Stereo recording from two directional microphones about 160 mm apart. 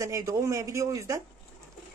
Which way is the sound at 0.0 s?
20° right (ahead or behind).